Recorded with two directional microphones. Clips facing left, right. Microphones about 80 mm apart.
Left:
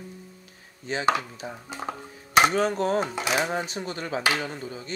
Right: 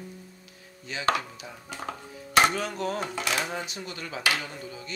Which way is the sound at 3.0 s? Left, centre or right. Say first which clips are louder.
Left 4 dB; left.